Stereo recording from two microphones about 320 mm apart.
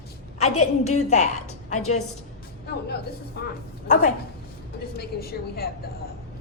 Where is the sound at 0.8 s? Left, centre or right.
Left.